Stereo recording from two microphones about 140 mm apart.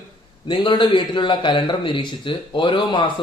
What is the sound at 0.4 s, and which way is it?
A man's voice, 35° left (ahead or behind).